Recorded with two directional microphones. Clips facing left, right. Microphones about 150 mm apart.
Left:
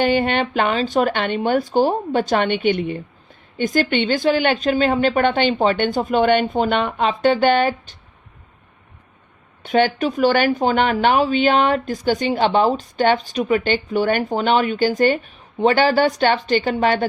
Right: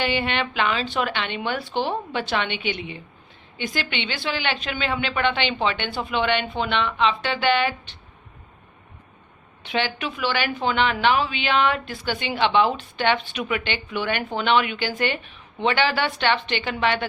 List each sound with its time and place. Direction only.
0.0 s a woman's voice: 45° left (ahead or behind)
9.6 s a woman's voice: 45° left (ahead or behind)